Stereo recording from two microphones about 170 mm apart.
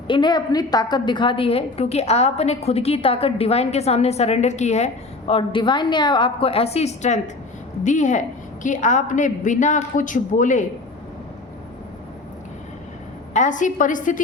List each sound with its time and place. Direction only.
0.1 s a woman's voice: 25° left (ahead or behind); by 4.9 s 40° left (ahead or behind)
5.3 s a woman's voice: 30° left (ahead or behind); by 10.7 s 50° left (ahead or behind)
13.3 s a woman's voice: 45° left (ahead or behind)